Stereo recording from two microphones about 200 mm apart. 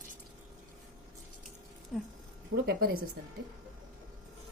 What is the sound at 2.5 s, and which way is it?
Speech, 70° right (ahead or behind).